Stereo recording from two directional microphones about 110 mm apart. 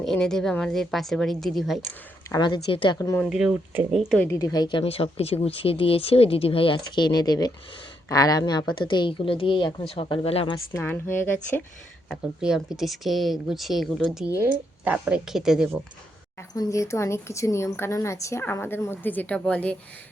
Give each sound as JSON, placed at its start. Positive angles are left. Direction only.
{"t": 0.0, "sound": "speech", "side_deg": 5}
{"t": 2.4, "sound": "a woman's voice", "side_deg": 45}
{"t": 3.2, "sound": "speech", "side_deg": -5}
{"t": 4.3, "sound": "a woman's voice", "side_deg": 35}
{"t": 9.8, "sound": "speech", "side_deg": 60}
{"t": 10.8, "sound": "a woman's voice", "side_deg": 20}
{"t": 12.1, "sound": "speech", "side_deg": -5}
{"t": 14.3, "sound": "a woman's voice", "side_deg": -15}
{"t": 16.6, "sound": "a woman's voice", "side_deg": 30}